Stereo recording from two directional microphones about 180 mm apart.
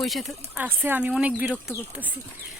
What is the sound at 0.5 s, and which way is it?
Speech, 10° right (ahead or behind).